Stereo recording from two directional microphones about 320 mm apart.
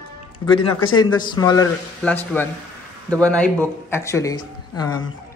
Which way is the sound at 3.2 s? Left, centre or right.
Centre.